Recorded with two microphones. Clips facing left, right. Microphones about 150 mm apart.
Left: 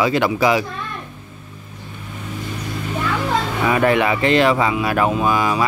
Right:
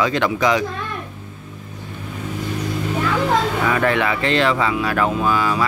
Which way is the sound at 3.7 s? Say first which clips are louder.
Left 5 dB; 15° left (ahead or behind).